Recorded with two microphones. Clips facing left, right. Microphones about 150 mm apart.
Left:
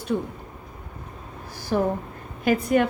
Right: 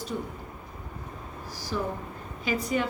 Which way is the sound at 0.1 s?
60° left (ahead or behind).